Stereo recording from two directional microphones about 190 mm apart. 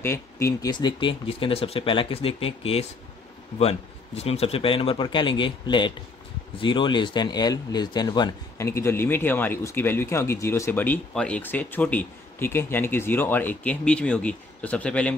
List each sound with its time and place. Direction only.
0.0 s speech: 15° left (ahead or behind)